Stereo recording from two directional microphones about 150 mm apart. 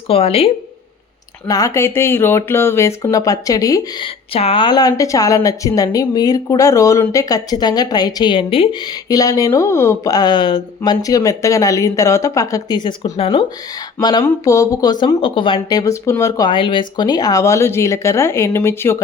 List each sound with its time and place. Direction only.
0.1 s speech: 40° left (ahead or behind)
1.5 s a woman's voice: 20° left (ahead or behind)
4.0 s a woman's voice: 40° left (ahead or behind)
8.9 s a woman's voice: 25° left (ahead or behind)
13.1 s speech: 40° left (ahead or behind)
14.0 s a woman's voice: 30° left (ahead or behind)
15.8 s a woman's voice: 20° left (ahead or behind)
16.5 s a woman's voice: 35° left (ahead or behind); by 19.0 s 15° left (ahead or behind)